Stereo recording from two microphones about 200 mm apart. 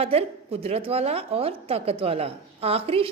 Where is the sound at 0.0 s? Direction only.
30° right (ahead or behind).